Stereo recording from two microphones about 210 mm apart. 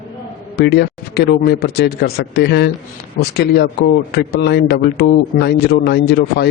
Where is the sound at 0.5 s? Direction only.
50° left (ahead or behind).